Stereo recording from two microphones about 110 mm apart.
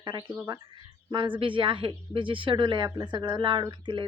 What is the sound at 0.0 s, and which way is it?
Speech, 40° right (ahead or behind).